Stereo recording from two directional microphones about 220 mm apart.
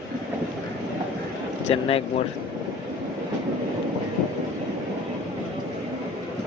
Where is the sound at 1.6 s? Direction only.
25° left (ahead or behind).